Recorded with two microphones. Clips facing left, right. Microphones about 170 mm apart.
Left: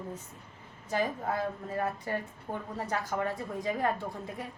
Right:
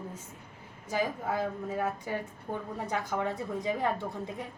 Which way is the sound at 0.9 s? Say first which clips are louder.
Even; 10° right (ahead or behind).